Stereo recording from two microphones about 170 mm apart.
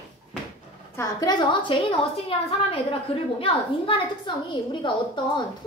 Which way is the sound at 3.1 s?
35° left (ahead or behind).